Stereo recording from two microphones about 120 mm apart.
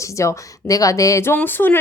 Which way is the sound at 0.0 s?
25° left (ahead or behind).